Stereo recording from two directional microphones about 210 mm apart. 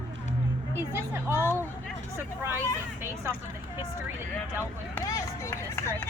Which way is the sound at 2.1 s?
10° right (ahead or behind).